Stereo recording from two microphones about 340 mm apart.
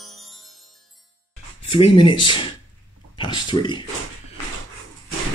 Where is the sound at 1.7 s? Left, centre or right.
Centre.